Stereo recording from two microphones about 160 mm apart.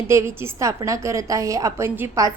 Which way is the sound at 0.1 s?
15° right (ahead or behind).